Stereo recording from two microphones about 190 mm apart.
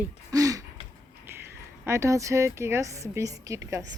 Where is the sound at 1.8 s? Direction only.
15° right (ahead or behind).